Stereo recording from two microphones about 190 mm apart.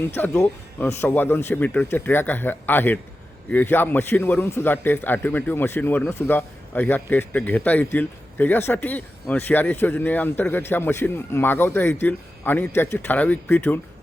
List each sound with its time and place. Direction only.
0.1 s a man's voice: 10° left (ahead or behind)